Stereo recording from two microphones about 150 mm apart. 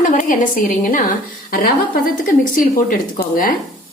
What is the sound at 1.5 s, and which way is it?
Speech, 75° left (ahead or behind).